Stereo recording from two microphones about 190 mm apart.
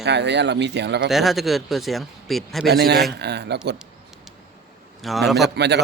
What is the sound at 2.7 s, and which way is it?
Speech, 60° right (ahead or behind).